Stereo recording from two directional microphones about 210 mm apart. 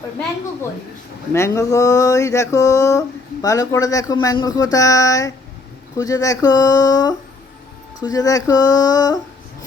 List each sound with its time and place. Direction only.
1.3 s speech: 15° left (ahead or behind)